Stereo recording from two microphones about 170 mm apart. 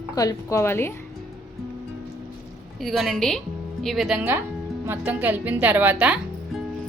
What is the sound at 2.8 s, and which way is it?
A woman's voice, centre (ahead or behind).